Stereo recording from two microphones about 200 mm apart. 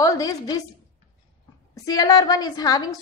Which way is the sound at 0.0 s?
15° left (ahead or behind).